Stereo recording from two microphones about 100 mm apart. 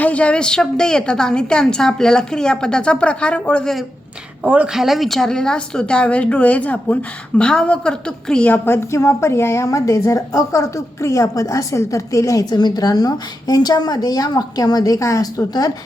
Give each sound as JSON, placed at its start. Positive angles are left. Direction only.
{"t": 0.0, "sound": "a woman's voice", "side_deg": 15}
{"t": 4.4, "sound": "a woman's voice", "side_deg": -10}